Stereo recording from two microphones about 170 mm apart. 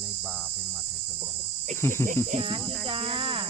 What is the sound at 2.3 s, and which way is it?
Speech, 35° right (ahead or behind).